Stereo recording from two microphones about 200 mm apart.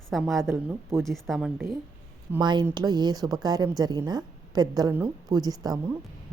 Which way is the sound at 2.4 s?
20° right (ahead or behind).